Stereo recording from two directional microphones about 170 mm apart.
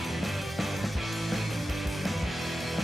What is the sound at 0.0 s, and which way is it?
Music, centre (ahead or behind).